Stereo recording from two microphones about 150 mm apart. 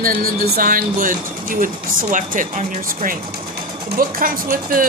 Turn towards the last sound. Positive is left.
turn(degrees=-70)  # may be behind; listen again after turning